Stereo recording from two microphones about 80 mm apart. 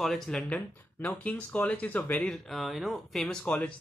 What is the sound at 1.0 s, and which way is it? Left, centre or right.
Speech, centre.